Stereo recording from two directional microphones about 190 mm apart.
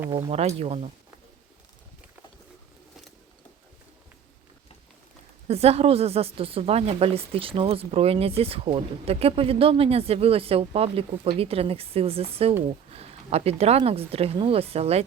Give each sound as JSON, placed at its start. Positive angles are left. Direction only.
{"t": 0.1, "sound": "speech", "side_deg": -30}
{"t": 5.5, "sound": "speech", "side_deg": -35}